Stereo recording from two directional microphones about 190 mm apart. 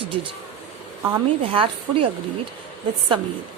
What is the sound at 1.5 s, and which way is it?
Speech, 30° right (ahead or behind).